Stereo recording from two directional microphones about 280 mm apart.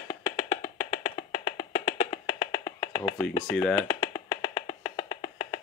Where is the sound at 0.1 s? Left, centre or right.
Centre.